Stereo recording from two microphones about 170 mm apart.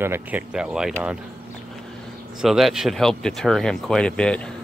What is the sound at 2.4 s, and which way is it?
Speech, centre (ahead or behind).